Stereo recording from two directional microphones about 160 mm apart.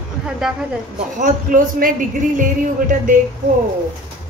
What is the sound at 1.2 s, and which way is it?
Speech, 55° right (ahead or behind).